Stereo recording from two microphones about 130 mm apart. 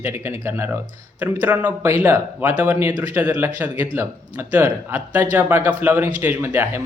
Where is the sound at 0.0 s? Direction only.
15° right (ahead or behind).